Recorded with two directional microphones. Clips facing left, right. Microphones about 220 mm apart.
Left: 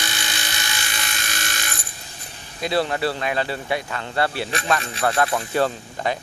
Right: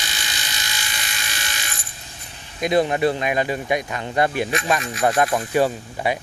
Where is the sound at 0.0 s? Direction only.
55° left (ahead or behind).